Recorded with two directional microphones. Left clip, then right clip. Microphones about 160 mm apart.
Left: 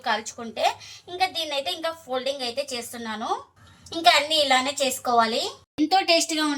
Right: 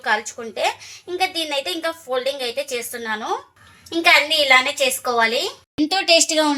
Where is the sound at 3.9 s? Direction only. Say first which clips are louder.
Right 4 dB; 35° right (ahead or behind).